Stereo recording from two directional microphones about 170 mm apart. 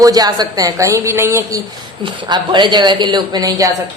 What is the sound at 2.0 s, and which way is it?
A woman's voice, 25° right (ahead or behind).